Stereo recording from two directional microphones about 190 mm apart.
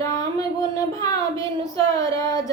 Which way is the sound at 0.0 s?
20° left (ahead or behind).